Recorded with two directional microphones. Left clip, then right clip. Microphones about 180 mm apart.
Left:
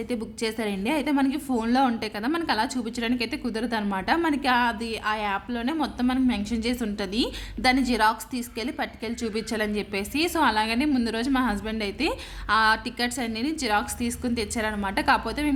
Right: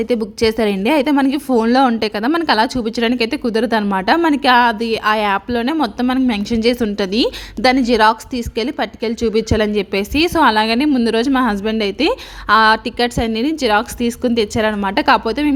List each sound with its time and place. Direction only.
0.1 s a woman's voice: 40° right (ahead or behind)